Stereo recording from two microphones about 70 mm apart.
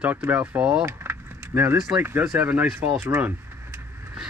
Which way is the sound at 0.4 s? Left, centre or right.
Centre.